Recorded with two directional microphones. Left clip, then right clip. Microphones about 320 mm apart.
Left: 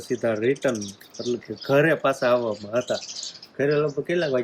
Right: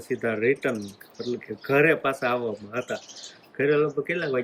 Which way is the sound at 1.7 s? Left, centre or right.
Centre.